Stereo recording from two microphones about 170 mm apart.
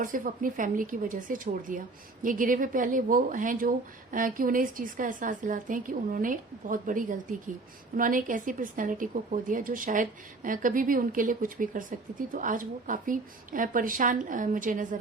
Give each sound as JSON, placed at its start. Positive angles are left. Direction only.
{"t": 0.0, "sound": "speech", "side_deg": -50}